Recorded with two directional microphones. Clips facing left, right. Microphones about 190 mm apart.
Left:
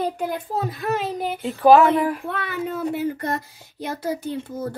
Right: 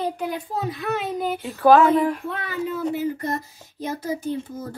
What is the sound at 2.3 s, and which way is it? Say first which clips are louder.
Speech: even; 60° left (ahead or behind).